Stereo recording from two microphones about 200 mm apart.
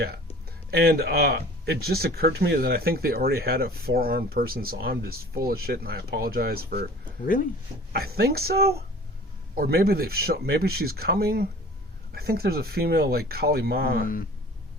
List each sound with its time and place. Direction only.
0.7 s speech: 50° right (ahead or behind)
7.9 s speech: 50° right (ahead or behind)